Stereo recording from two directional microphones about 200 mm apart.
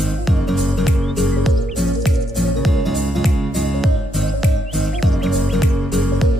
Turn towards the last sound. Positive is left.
turn(degrees=0)  # may be behind; listen again after turning